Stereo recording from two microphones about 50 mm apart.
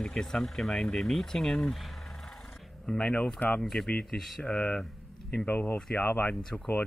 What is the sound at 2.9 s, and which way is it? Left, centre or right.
Speech, left.